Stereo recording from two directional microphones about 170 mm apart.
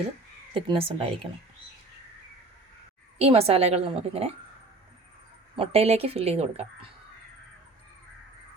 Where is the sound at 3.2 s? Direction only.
35° right (ahead or behind).